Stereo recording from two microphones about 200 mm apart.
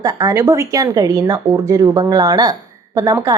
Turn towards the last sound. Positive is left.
turn(degrees=-15)  # may be behind; listen again after turning